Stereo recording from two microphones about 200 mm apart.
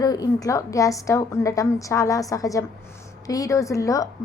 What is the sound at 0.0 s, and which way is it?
A woman's voice, 20° left (ahead or behind).